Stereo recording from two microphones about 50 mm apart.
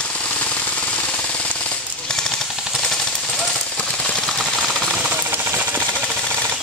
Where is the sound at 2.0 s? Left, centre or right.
Centre.